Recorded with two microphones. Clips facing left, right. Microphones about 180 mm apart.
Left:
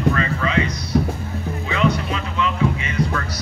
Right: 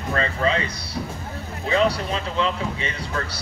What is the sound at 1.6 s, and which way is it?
Music, 35° right (ahead or behind).